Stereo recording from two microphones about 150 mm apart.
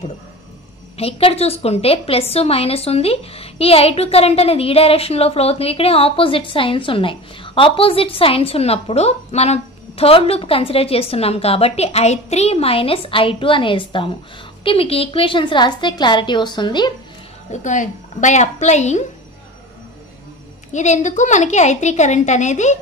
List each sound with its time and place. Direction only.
0.9 s a woman's voice: 40° left (ahead or behind)
17.5 s a woman's voice: 55° left (ahead or behind)
20.7 s a woman's voice: 50° left (ahead or behind)